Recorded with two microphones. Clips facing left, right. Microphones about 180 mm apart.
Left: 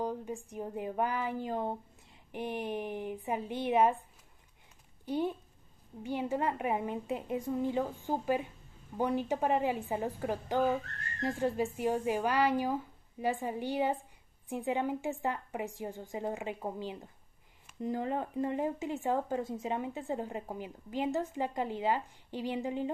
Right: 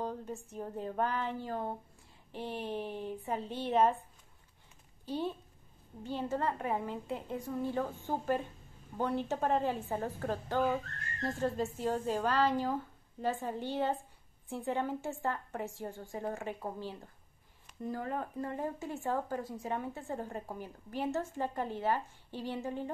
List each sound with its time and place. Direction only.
0.0 s a woman's voice: 10° left (ahead or behind)
5.0 s a woman's voice: 15° left (ahead or behind)